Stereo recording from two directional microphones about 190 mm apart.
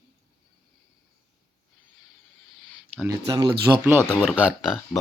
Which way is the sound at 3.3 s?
25° right (ahead or behind).